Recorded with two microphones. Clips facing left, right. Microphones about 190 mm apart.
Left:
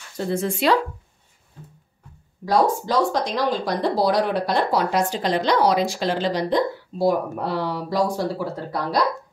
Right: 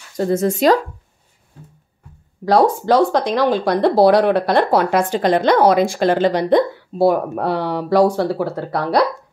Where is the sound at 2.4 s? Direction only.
60° right (ahead or behind).